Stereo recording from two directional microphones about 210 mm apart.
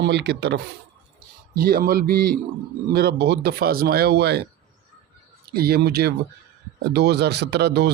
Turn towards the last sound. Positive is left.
turn(degrees=-50)  # may be behind; listen again after turning